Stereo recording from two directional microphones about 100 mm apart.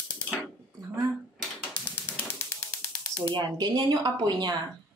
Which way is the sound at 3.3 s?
45° right (ahead or behind).